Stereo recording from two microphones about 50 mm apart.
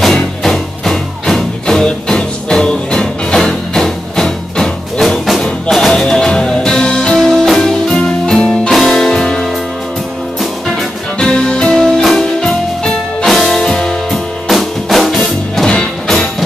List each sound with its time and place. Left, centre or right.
0.0 s music: centre
10.7 s music: centre
14.1 s music: centre
15.1 s music: centre